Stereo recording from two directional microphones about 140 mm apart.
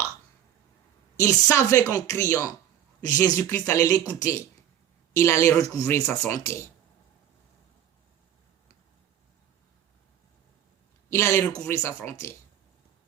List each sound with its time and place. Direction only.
1.1 s speech: 20° left (ahead or behind)
11.1 s speech: 20° left (ahead or behind)